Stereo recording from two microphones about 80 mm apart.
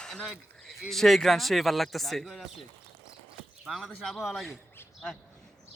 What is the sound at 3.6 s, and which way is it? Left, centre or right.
Speech, centre.